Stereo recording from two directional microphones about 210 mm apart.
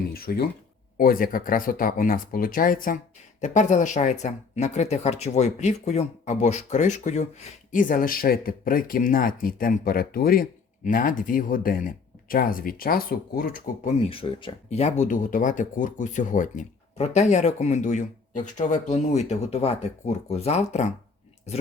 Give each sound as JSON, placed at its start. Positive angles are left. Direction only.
{"t": 0.1, "sound": "speech", "side_deg": 45}
{"t": 14.0, "sound": "speech", "side_deg": 25}